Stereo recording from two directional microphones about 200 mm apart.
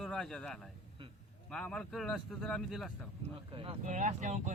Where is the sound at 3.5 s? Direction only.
30° right (ahead or behind).